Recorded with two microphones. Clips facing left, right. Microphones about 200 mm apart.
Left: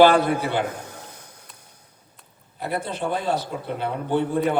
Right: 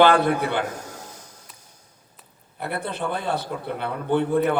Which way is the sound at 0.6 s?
60° left (ahead or behind).